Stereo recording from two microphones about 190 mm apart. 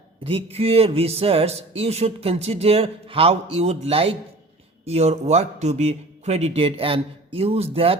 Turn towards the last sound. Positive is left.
turn(degrees=-30)  # may be behind; listen again after turning